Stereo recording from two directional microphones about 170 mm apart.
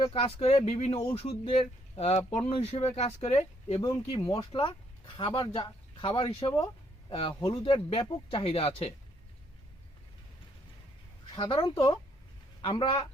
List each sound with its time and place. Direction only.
0.1 s speech: 35° left (ahead or behind)
3.8 s speech: 25° left (ahead or behind)
11.3 s speech: 30° left (ahead or behind)